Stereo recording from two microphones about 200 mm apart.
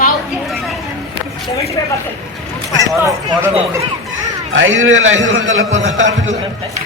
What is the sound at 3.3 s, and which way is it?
Speech, 10° right (ahead or behind).